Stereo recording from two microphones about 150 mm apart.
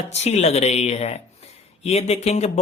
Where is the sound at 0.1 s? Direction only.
50° left (ahead or behind).